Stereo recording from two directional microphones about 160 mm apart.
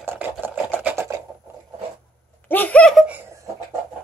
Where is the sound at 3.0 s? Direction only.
10° right (ahead or behind).